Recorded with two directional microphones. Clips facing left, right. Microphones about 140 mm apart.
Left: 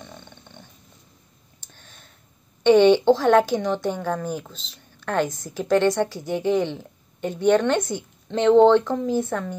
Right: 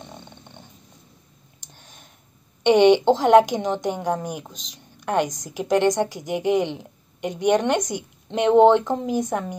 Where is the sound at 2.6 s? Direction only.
15° right (ahead or behind).